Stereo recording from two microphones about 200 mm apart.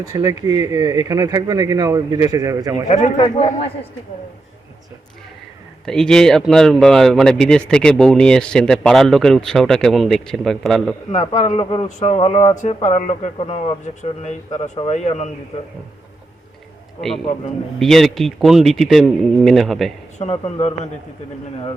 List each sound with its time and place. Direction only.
0.1 s speech: 15° right (ahead or behind)
2.9 s speech: 30° left (ahead or behind)
5.8 s speech: 5° left (ahead or behind)
11.3 s speech: 30° left (ahead or behind)
17.7 s speech: centre (ahead or behind)
20.1 s speech: 30° left (ahead or behind)